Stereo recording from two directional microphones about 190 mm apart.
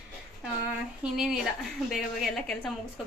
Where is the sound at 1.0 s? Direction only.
5° right (ahead or behind).